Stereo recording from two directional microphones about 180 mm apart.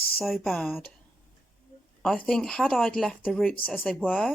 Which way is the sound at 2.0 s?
5° left (ahead or behind).